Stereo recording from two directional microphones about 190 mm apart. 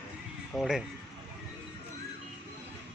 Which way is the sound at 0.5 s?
Centre (ahead or behind).